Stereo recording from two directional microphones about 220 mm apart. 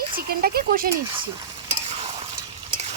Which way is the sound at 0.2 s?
40° right (ahead or behind).